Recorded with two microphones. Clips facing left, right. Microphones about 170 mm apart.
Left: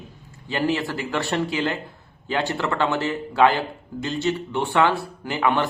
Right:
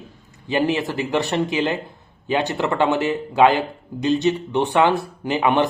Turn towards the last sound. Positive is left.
turn(degrees=-20)  # may be behind; listen again after turning